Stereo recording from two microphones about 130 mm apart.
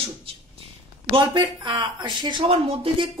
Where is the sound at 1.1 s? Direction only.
40° right (ahead or behind).